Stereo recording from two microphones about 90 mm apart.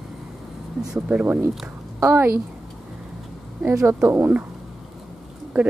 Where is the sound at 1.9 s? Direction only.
25° right (ahead or behind).